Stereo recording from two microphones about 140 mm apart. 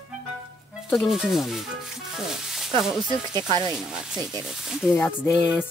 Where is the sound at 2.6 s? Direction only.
Centre (ahead or behind).